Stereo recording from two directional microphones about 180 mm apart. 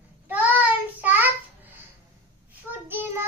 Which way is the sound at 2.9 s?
10° right (ahead or behind).